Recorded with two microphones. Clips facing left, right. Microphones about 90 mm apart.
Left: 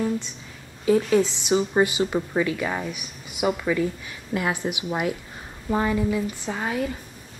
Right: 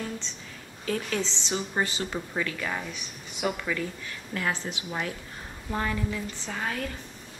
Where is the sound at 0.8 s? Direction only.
15° left (ahead or behind).